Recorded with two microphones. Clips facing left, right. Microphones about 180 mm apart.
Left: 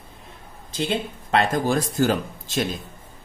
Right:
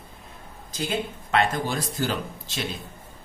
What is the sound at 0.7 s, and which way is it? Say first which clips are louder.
Speech: left 3 dB; 30° left (ahead or behind).